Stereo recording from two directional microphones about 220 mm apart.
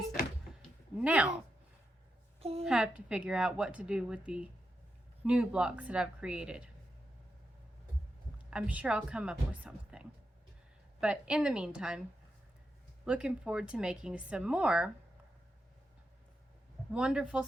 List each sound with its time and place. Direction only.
1.0 s a woman's voice: 5° right (ahead or behind)
2.4 s a woman's voice: 25° right (ahead or behind)
2.6 s a woman's voice: 5° right (ahead or behind)
8.4 s a woman's voice: 5° right (ahead or behind)
13.1 s a woman's voice: 5° right (ahead or behind)
16.9 s a woman's voice: 5° right (ahead or behind)